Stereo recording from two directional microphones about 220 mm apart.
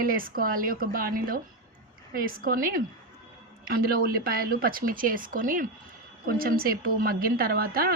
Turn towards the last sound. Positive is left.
turn(degrees=-45)  # may be behind; listen again after turning